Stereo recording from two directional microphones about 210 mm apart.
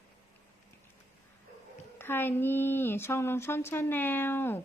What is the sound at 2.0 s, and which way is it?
Speech, 10° left (ahead or behind).